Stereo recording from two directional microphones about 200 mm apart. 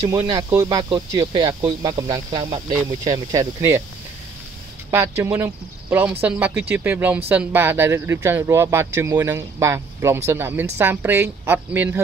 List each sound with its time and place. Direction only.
0.1 s speech: 15° right (ahead or behind)
2.7 s speech: 10° right (ahead or behind)
4.9 s speech: 15° right (ahead or behind)